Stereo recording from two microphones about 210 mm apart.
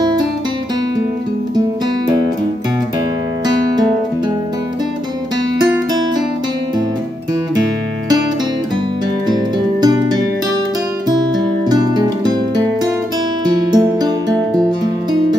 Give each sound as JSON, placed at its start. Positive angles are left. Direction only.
{"t": 9.8, "sound": "music", "side_deg": -20}
{"t": 13.7, "sound": "music", "side_deg": -20}